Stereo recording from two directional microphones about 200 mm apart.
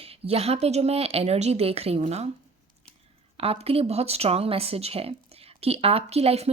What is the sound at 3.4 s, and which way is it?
Speech, 30° right (ahead or behind).